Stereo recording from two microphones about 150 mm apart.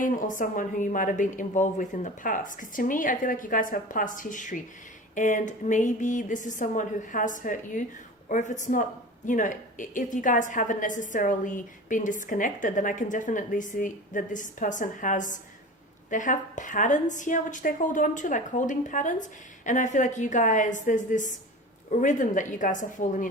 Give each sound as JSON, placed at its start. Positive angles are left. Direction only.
{"t": 0.0, "sound": "a woman's voice", "side_deg": 60}